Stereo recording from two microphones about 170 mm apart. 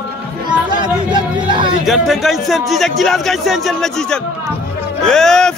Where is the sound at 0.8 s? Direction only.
25° right (ahead or behind).